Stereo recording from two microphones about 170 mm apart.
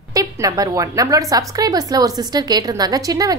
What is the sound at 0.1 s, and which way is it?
A woman's voice, 20° right (ahead or behind).